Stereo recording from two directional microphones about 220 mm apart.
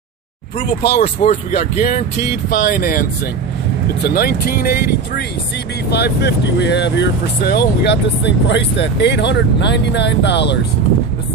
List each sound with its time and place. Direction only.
0.9 s speech: 30° left (ahead or behind); by 10.6 s 50° left (ahead or behind)